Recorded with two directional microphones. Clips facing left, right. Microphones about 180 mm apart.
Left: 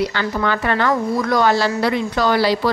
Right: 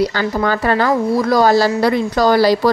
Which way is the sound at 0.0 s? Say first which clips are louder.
Right 3 dB; 35° right (ahead or behind).